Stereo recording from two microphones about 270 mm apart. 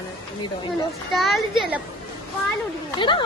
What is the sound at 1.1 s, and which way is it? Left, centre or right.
Speech, centre.